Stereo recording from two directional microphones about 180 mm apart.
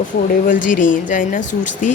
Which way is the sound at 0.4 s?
45° left (ahead or behind).